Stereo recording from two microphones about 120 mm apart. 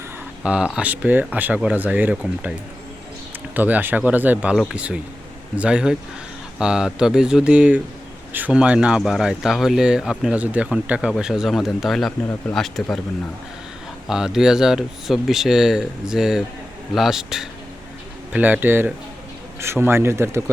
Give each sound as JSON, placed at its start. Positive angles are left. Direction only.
{"t": 0.4, "sound": "speech", "side_deg": -10}
{"t": 3.5, "sound": "speech", "side_deg": -15}
{"t": 14.1, "sound": "speech", "side_deg": -5}